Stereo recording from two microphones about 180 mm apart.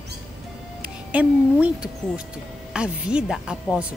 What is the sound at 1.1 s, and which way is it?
A woman's voice, 5° right (ahead or behind).